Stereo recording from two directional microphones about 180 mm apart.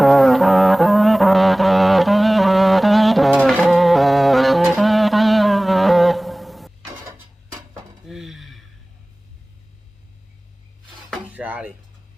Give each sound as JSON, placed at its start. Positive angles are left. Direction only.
{"t": 0.0, "sound": "music", "side_deg": 0}
{"t": 7.7, "sound": "dishes", "side_deg": 0}
{"t": 11.1, "sound": "a sound", "side_deg": -10}